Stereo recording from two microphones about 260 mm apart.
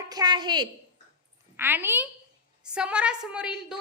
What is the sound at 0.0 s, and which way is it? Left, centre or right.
A woman's voice, centre.